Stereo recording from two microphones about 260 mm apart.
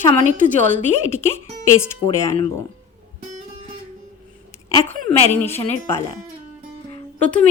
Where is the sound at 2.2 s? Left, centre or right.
Centre.